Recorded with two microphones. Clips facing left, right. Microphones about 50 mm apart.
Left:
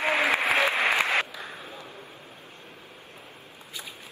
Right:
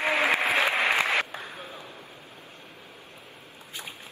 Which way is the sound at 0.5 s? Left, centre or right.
Right.